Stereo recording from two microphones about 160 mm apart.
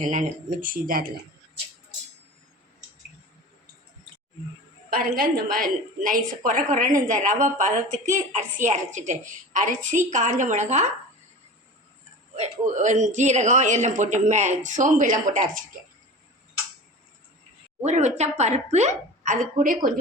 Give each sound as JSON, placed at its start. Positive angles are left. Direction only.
{"t": 0.0, "sound": "a woman's voice", "side_deg": -55}
{"t": 4.9, "sound": "a woman's voice", "side_deg": -65}
{"t": 12.4, "sound": "speech", "side_deg": -50}
{"t": 17.8, "sound": "speech", "side_deg": -45}